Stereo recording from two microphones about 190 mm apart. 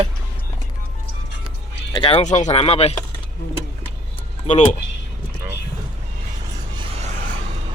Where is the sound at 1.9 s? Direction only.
30° left (ahead or behind).